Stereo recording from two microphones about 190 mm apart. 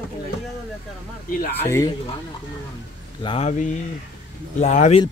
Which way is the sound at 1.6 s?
15° left (ahead or behind).